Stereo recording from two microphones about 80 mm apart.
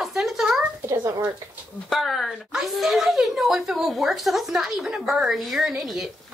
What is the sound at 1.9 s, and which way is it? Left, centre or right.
A woman's voice, centre.